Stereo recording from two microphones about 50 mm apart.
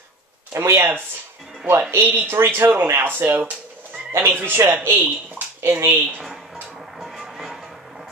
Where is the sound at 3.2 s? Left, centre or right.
Right.